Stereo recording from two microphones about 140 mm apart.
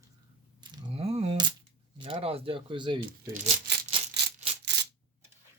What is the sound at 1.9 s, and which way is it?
Speech, 35° right (ahead or behind).